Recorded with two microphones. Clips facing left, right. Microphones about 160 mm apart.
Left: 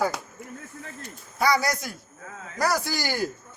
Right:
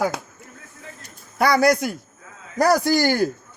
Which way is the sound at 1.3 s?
60° right (ahead or behind).